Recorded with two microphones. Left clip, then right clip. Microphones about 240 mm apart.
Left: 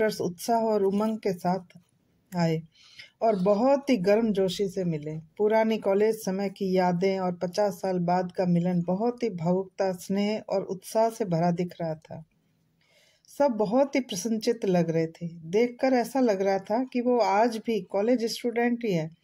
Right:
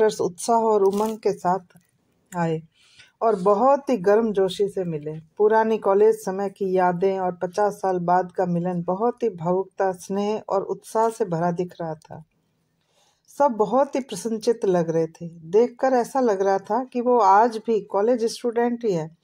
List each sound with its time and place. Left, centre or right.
0.2 s speech: right
13.4 s speech: right